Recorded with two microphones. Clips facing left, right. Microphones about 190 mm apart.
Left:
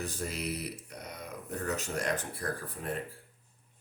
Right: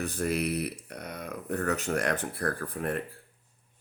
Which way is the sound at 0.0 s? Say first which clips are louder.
Right 7 dB; 60° right (ahead or behind).